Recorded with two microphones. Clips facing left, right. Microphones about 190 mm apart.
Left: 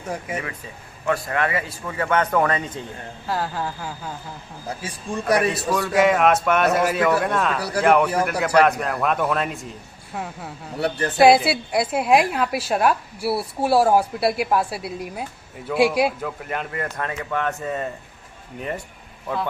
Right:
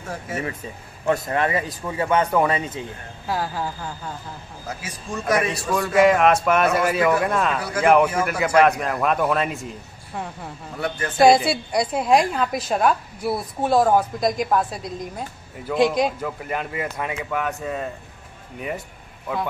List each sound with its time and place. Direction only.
0.0 s a woman's voice: 15° left (ahead or behind)
1.0 s a man's voice: 25° right (ahead or behind); by 4.1 s centre (ahead or behind)
4.6 s speech: 30° left (ahead or behind)
5.3 s a man's voice: centre (ahead or behind)
10.8 s speech: 35° left (ahead or behind)
11.1 s a woman's voice: 5° left (ahead or behind)